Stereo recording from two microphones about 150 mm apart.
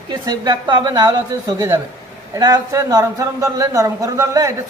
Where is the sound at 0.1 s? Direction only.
30° right (ahead or behind).